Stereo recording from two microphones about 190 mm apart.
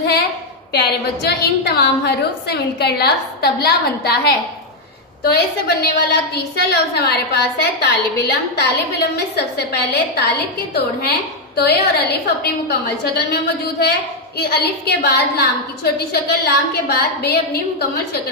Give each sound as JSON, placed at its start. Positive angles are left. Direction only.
{"t": 0.7, "sound": "a woman's voice", "side_deg": 60}